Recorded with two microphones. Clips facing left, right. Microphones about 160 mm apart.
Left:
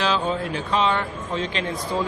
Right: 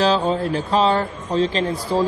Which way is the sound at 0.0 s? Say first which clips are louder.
Right 5 dB; 35° right (ahead or behind).